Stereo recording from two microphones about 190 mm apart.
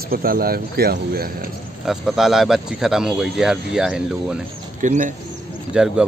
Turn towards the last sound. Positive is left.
turn(degrees=-5)  # may be behind; listen again after turning